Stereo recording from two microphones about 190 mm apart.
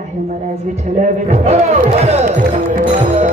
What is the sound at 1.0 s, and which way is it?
A child's voice, 35° right (ahead or behind).